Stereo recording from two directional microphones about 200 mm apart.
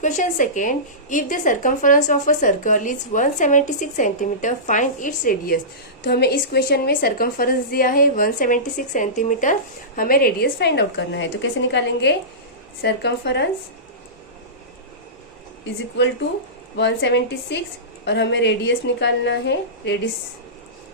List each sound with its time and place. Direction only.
0.0 s a woman's voice: 40° left (ahead or behind)
6.1 s a woman's voice: 55° left (ahead or behind)
16.7 s a woman's voice: 60° left (ahead or behind)